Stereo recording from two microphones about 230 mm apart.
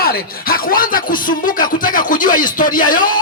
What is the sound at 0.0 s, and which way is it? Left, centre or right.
Speech, left.